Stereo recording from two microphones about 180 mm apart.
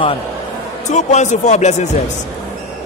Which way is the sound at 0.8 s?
40° left (ahead or behind).